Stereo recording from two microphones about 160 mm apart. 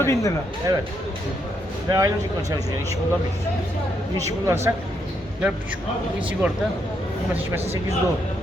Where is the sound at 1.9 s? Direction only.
20° right (ahead or behind).